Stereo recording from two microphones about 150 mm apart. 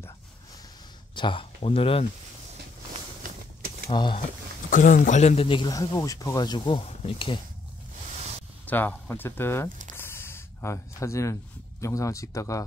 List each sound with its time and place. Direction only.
1.1 s speech: 35° left (ahead or behind)
3.9 s speech: 30° left (ahead or behind)
4.6 s speech: 60° left (ahead or behind); by 5.7 s 35° left (ahead or behind)
5.7 s speech: 25° left (ahead or behind)
8.2 s a sound: 45° right (ahead or behind)
8.6 s speech: 10° left (ahead or behind)
9.9 s a sound: 15° left (ahead or behind)
11.8 s speech: 20° left (ahead or behind)